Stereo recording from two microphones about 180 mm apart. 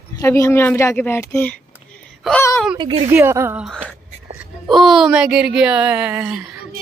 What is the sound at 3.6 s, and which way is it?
Speech, centre (ahead or behind).